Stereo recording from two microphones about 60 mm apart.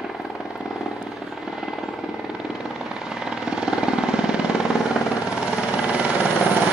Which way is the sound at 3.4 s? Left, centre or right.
Centre.